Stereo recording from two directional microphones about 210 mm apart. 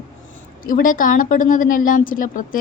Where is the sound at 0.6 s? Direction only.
40° left (ahead or behind).